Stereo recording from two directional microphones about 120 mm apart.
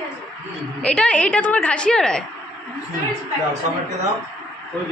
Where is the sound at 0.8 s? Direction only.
10° left (ahead or behind).